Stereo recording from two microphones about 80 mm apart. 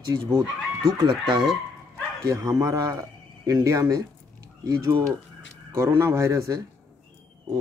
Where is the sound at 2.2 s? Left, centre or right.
Right.